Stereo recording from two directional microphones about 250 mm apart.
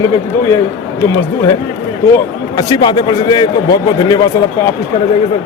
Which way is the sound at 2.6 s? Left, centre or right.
Centre.